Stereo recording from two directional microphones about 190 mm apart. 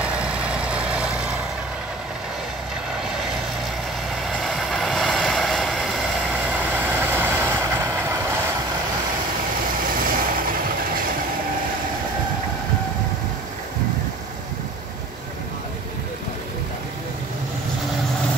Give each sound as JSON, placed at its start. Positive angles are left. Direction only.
{"t": 0.0, "sound": "vehicle", "side_deg": -5}
{"t": 4.4, "sound": "vehicle", "side_deg": 0}
{"t": 9.8, "sound": "vehicle", "side_deg": -45}